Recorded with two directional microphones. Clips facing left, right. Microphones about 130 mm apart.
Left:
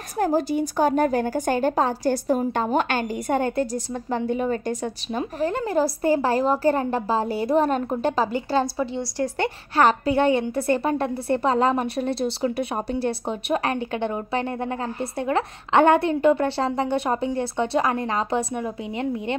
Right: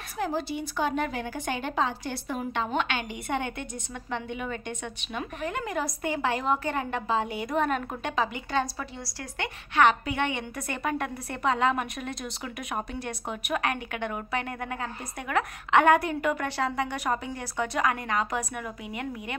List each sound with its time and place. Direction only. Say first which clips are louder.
0.2 s a woman's voice: left 8 dB; 45° left (ahead or behind); by 19.3 s 25° left (ahead or behind)